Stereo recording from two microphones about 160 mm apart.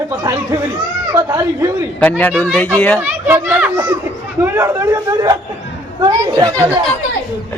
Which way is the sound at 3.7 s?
25° right (ahead or behind).